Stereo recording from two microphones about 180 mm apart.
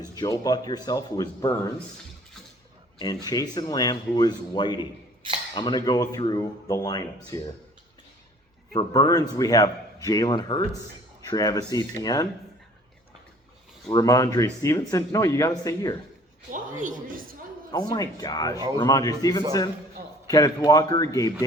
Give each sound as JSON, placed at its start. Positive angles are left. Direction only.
{"t": 0.1, "sound": "a man's voice", "side_deg": 20}
{"t": 3.2, "sound": "a man's voice", "side_deg": 20}
{"t": 8.8, "sound": "a man's voice", "side_deg": 25}
{"t": 13.9, "sound": "speech", "side_deg": 20}
{"t": 16.5, "sound": "a man's voice", "side_deg": -45}
{"t": 17.7, "sound": "a man's voice", "side_deg": 20}